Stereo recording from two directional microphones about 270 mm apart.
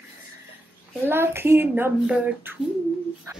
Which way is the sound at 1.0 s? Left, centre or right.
Centre.